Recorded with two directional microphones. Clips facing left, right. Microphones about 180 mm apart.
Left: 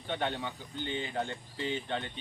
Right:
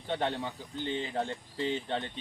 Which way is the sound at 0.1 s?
35° right (ahead or behind).